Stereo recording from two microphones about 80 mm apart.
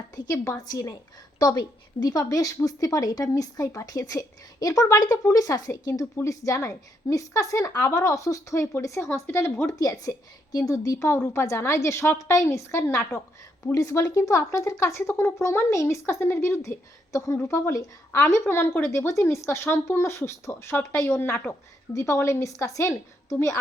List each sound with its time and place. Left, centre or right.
0.5 s speech: left
9.7 s speech: left